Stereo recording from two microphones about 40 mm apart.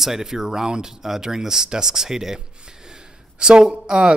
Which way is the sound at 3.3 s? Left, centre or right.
Right.